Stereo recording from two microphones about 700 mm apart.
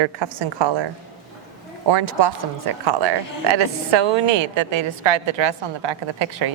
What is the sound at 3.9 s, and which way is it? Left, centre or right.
A woman's voice, right.